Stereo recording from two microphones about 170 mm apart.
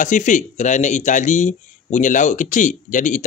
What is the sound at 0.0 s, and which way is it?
A man's voice, 45° left (ahead or behind).